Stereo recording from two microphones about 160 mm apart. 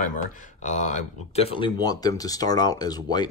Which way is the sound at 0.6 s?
50° left (ahead or behind).